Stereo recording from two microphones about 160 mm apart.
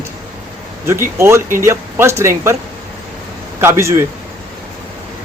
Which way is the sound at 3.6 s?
15° right (ahead or behind).